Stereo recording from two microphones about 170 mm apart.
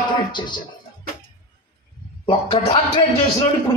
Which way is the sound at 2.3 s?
30° left (ahead or behind).